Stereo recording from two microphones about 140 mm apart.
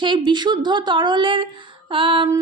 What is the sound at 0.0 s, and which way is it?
A woman's voice, 35° right (ahead or behind).